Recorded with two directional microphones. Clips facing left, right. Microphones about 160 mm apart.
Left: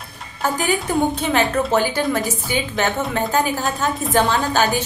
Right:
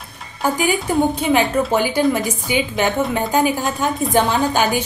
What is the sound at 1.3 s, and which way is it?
A woman's voice, 10° right (ahead or behind).